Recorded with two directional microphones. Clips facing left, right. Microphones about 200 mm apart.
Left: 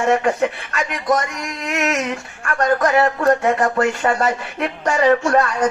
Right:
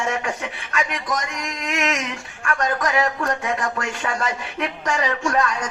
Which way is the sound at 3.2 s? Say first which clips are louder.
Left 8 dB; 35° left (ahead or behind).